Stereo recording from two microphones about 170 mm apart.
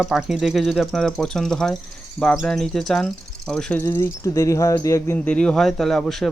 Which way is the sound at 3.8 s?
15° left (ahead or behind).